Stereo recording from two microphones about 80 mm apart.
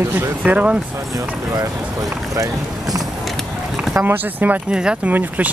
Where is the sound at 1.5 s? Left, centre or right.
Right.